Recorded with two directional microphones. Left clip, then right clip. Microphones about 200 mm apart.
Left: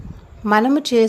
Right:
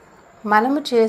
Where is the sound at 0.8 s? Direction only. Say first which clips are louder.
Left 1 dB; 65° left (ahead or behind).